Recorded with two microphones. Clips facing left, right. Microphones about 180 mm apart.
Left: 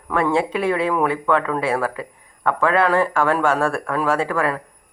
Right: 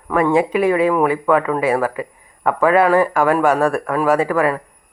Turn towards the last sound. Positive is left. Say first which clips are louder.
# right 5 dB
turn(degrees=-10)  # may be behind; listen again after turning